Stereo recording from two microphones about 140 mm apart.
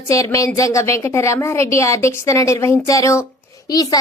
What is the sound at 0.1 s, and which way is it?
A woman's voice, 25° left (ahead or behind).